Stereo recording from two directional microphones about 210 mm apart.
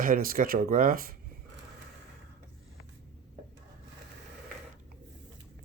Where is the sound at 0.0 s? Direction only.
45° right (ahead or behind).